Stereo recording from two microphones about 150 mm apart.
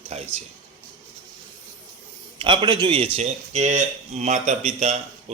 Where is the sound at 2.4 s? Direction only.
35° right (ahead or behind).